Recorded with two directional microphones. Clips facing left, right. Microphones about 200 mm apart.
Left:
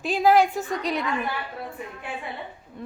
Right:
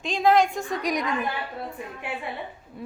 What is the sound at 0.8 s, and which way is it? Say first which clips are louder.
Speech: right 3 dB; 15° right (ahead or behind).